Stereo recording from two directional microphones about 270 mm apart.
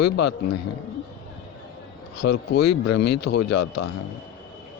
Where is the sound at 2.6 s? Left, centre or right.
Left.